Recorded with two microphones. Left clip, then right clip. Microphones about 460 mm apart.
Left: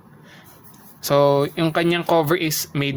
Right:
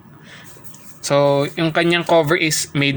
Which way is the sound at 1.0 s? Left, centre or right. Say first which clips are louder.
Right 1 dB; left.